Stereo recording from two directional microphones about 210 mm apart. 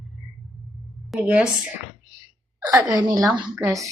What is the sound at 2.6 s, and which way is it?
A woman's voice, 15° right (ahead or behind).